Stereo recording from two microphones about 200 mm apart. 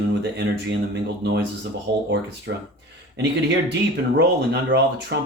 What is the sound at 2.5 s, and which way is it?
Speech, 55° right (ahead or behind).